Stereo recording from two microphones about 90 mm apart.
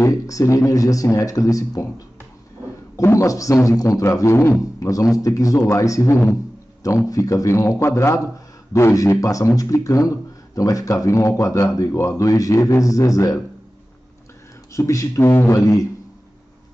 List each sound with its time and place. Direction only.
0.0 s a man's voice: 35° left (ahead or behind)
3.0 s a man's voice: 35° left (ahead or behind)
14.7 s a man's voice: 35° left (ahead or behind)